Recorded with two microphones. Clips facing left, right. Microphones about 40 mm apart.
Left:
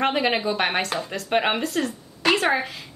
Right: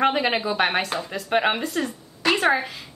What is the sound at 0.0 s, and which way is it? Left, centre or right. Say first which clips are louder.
A woman's voice: right 1 dB; centre.